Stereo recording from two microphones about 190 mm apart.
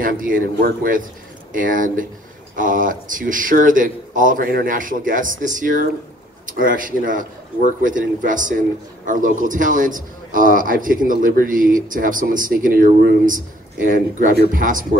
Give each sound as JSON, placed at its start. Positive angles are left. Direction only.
{"t": 0.0, "sound": "a man's voice", "side_deg": -45}
{"t": 1.5, "sound": "a man's voice", "side_deg": -45}